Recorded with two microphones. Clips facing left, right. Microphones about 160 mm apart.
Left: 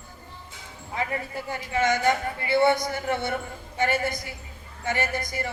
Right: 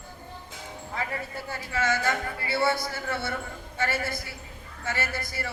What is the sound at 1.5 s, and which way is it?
A man's voice, 15° left (ahead or behind).